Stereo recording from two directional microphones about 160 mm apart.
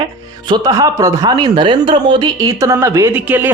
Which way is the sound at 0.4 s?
25° right (ahead or behind).